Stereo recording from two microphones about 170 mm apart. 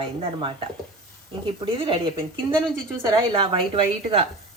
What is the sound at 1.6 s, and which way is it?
A woman's voice, 30° right (ahead or behind).